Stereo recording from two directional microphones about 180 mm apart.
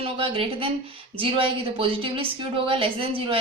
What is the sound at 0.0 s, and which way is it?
A woman's voice, 30° right (ahead or behind).